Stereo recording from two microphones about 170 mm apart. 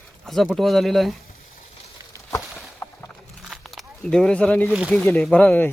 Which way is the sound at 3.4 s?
Centre (ahead or behind).